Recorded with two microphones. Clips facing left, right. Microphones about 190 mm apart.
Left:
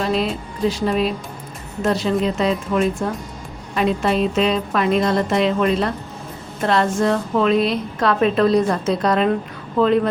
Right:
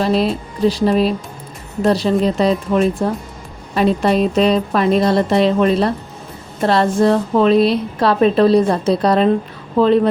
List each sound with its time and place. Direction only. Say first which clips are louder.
0.0 s a woman's voice: right 4 dB; 35° right (ahead or behind)